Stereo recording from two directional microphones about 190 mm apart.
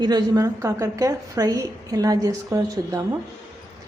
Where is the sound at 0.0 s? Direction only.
20° right (ahead or behind).